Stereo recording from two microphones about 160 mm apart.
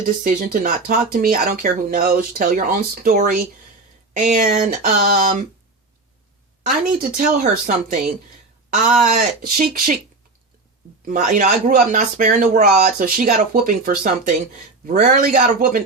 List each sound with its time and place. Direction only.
0.3 s speech: 60° right (ahead or behind)
6.6 s speech: 60° right (ahead or behind)
8.7 s speech: 50° right (ahead or behind)
11.0 s speech: 55° right (ahead or behind)